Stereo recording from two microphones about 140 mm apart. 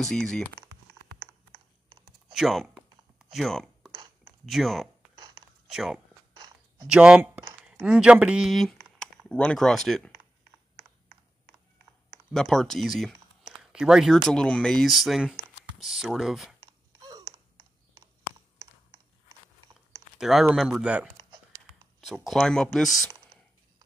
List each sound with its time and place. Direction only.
0.0 s speech: 5° left (ahead or behind)
2.3 s whispering: centre (ahead or behind)
4.5 s speech: centre (ahead or behind)
12.3 s speech: centre (ahead or behind)
17.0 s a sound: 25° right (ahead or behind)
18.6 s a sound: 25° right (ahead or behind)
20.2 s speech: centre (ahead or behind)